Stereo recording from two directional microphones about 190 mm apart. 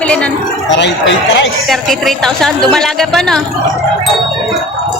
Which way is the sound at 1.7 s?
Centre (ahead or behind).